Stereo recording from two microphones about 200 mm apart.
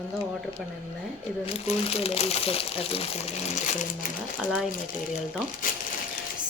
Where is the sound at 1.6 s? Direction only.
30° left (ahead or behind).